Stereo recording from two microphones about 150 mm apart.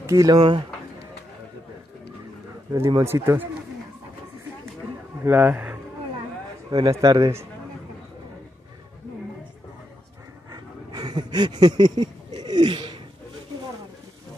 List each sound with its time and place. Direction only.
0.0 s speech: 20° right (ahead or behind)
2.7 s speech: 20° right (ahead or behind)
5.2 s speech: 15° right (ahead or behind)
6.7 s speech: 25° right (ahead or behind)
10.5 s a sound: 25° right (ahead or behind)